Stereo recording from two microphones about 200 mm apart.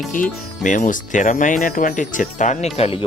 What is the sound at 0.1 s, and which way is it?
Speech, 40° left (ahead or behind).